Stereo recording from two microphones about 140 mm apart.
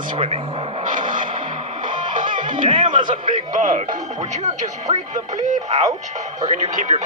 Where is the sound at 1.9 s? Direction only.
70° right (ahead or behind).